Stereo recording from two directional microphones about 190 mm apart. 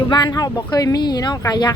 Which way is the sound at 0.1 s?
20° left (ahead or behind).